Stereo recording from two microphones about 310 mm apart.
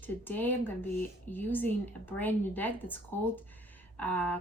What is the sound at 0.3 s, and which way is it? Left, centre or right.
A woman's voice, centre.